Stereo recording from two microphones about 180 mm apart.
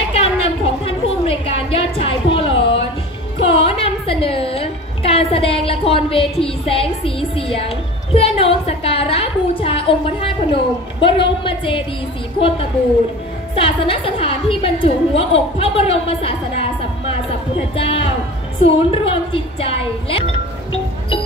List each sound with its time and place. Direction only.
0.1 s a sound: 35° left (ahead or behind)
6.4 s a woman's voice: 30° left (ahead or behind)
17.7 s a woman's voice: 30° left (ahead or behind)